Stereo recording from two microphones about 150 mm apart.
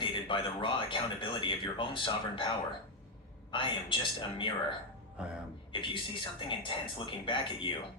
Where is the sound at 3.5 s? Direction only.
35° left (ahead or behind).